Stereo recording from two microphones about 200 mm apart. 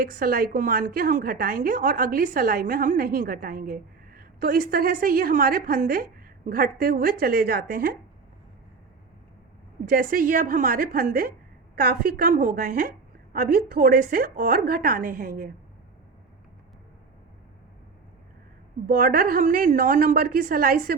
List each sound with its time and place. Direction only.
0.0 s a woman's voice: 45° right (ahead or behind)
9.9 s a woman's voice: 45° right (ahead or behind)
18.9 s a woman's voice: 45° right (ahead or behind)